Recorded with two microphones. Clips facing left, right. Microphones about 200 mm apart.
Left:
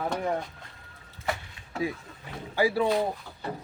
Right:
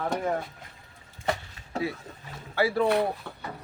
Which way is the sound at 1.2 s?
35° right (ahead or behind).